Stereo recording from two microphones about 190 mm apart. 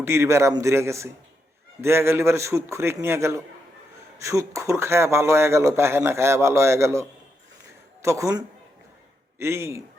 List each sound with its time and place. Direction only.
0.0 s speech: 15° right (ahead or behind)